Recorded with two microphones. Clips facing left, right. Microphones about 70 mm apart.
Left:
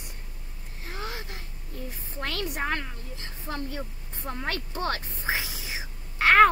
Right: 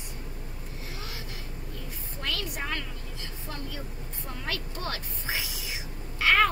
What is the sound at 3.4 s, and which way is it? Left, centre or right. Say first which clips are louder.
A woman's voice: left 6 dB; left.